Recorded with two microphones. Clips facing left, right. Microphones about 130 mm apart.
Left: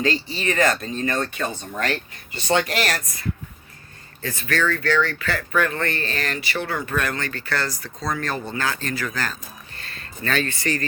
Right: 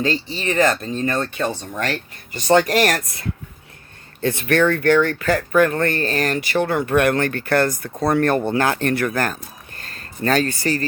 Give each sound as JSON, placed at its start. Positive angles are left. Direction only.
{"t": 0.0, "sound": "speech", "side_deg": -30}
{"t": 2.5, "sound": "speech", "side_deg": -40}
{"t": 4.2, "sound": "speech", "side_deg": -60}